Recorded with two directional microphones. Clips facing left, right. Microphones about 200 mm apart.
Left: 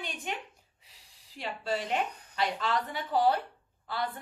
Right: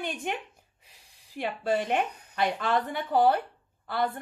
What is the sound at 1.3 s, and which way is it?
A woman's voice, 55° right (ahead or behind).